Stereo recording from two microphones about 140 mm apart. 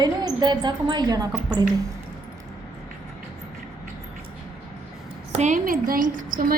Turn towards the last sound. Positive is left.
turn(degrees=-85)